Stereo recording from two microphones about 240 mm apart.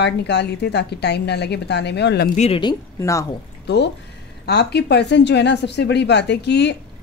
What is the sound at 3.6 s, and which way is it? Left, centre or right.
A woman's voice, left.